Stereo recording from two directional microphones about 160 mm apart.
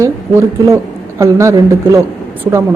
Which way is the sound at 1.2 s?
20° right (ahead or behind).